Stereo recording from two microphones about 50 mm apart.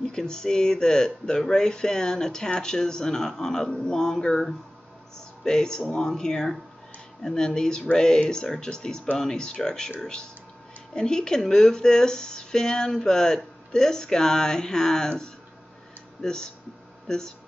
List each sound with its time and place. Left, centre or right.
0.0 s speech: centre